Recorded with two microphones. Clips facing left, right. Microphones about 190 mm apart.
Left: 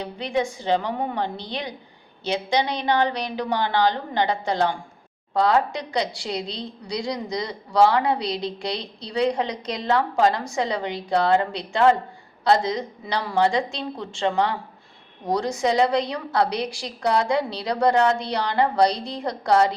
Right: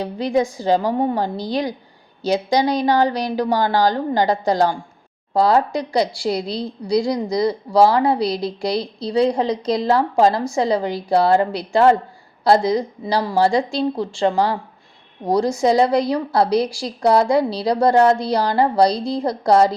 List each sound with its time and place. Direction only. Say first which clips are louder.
0.0 s a woman's voice: right 6 dB; 35° right (ahead or behind)